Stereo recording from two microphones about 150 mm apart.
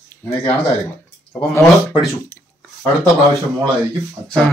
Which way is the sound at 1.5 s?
20° left (ahead or behind).